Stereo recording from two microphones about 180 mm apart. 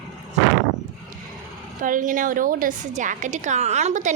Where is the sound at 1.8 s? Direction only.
45° right (ahead or behind).